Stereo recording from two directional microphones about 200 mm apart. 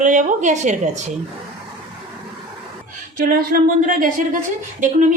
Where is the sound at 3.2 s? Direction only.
45° right (ahead or behind).